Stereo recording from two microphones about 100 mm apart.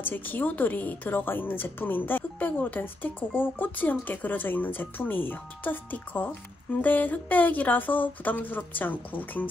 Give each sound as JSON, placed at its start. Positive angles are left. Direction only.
{"t": 0.0, "sound": "a woman's voice", "side_deg": 20}